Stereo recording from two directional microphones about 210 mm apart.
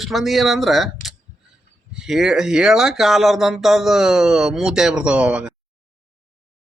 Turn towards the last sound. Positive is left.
turn(degrees=-5)  # may be behind; listen again after turning